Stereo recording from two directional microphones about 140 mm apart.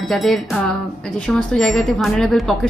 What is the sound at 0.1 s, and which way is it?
Speech, centre (ahead or behind).